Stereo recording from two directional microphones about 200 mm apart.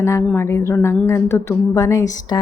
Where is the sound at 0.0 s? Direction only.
15° left (ahead or behind).